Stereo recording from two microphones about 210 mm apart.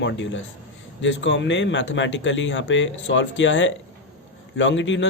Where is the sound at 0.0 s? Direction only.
60° left (ahead or behind).